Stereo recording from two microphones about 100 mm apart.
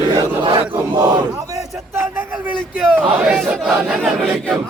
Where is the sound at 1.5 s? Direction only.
25° right (ahead or behind).